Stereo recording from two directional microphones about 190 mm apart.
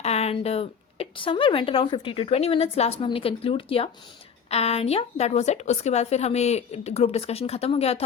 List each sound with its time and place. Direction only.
0.0 s speech: 35° left (ahead or behind)